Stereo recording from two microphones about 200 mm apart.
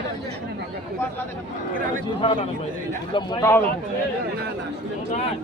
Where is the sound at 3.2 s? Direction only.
20° left (ahead or behind).